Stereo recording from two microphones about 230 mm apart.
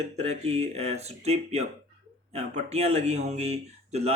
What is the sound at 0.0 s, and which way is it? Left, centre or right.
Speech, right.